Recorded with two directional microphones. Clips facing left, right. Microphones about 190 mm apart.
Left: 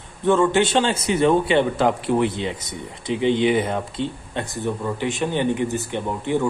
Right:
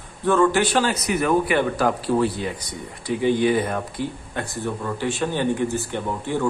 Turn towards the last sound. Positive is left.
turn(degrees=20)  # may be behind; listen again after turning